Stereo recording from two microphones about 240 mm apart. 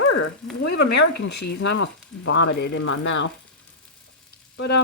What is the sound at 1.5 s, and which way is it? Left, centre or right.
Speech, left.